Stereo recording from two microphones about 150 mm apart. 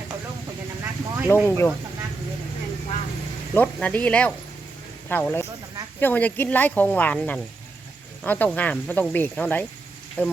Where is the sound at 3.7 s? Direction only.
10° left (ahead or behind).